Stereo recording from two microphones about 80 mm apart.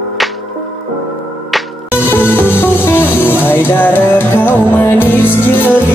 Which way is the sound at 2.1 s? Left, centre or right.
Left.